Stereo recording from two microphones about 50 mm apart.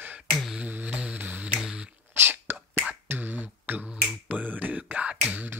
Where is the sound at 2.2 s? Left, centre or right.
Right.